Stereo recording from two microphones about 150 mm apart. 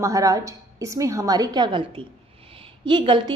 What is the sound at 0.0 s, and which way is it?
A woman's voice, 20° right (ahead or behind).